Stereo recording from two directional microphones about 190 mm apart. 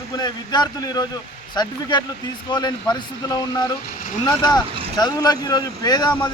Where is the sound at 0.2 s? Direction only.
20° left (ahead or behind).